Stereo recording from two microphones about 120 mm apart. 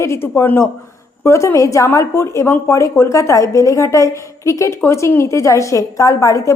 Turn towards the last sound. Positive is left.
turn(degrees=25)  # may be behind; listen again after turning